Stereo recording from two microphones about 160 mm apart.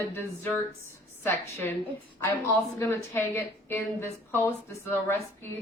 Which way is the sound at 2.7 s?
15° left (ahead or behind).